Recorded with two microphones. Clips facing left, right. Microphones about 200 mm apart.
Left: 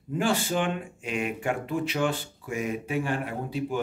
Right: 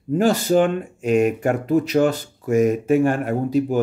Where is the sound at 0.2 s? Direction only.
40° right (ahead or behind).